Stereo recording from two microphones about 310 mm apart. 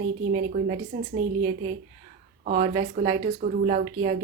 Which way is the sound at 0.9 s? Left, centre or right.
Right.